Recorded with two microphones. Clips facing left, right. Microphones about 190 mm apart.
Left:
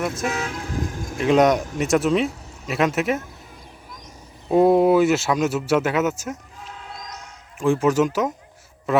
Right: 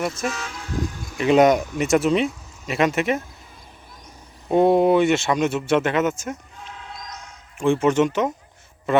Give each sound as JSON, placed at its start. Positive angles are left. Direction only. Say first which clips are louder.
{"t": 0.3, "sound": "vehicle", "louder": "left 3 dB", "side_deg": 55}
{"t": 1.2, "sound": "speech", "louder": "right 1 dB", "side_deg": 0}
{"t": 4.4, "sound": "a man's voice", "louder": "left 1 dB", "side_deg": 0}